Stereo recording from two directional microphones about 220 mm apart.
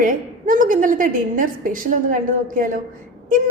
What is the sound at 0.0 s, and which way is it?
A woman's voice, 35° right (ahead or behind).